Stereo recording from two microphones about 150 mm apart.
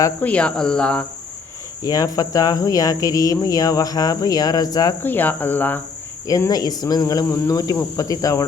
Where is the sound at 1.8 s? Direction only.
25° left (ahead or behind).